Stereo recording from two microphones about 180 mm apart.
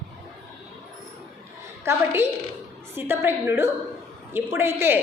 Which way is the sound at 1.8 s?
15° right (ahead or behind).